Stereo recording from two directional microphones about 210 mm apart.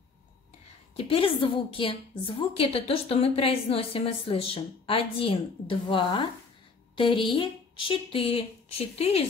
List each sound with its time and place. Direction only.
0.9 s a woman's voice: 25° left (ahead or behind)